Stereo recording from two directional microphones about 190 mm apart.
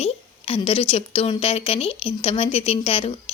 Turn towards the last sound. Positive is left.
turn(degrees=30)  # may be behind; listen again after turning